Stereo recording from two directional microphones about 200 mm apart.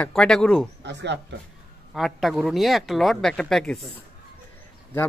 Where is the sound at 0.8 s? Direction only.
60° right (ahead or behind).